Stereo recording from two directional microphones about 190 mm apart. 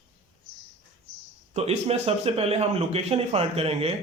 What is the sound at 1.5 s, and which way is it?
A man's voice, 35° right (ahead or behind).